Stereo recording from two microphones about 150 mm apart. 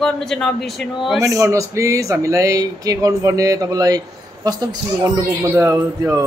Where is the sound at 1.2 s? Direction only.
20° right (ahead or behind).